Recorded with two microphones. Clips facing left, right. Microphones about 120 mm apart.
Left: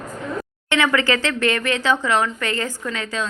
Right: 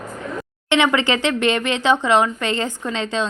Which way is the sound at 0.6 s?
20° right (ahead or behind).